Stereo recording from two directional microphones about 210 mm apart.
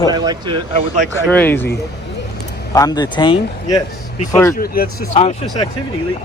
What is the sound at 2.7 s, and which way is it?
Speech, 15° left (ahead or behind).